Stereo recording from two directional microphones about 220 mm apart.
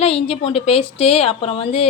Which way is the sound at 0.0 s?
25° left (ahead or behind).